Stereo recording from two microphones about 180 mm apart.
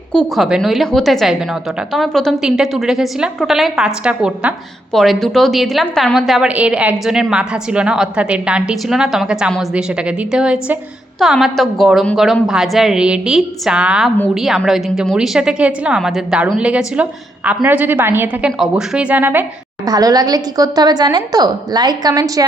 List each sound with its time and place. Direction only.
0.1 s a woman's voice: centre (ahead or behind); by 22.4 s 20° right (ahead or behind)